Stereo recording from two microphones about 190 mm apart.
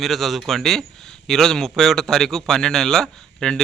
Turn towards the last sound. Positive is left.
turn(degrees=5)  # may be behind; listen again after turning